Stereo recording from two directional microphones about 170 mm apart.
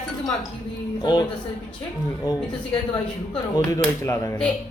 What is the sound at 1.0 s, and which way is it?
Speech, 25° left (ahead or behind).